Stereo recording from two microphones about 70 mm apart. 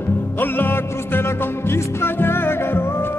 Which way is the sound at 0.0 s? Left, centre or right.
Left.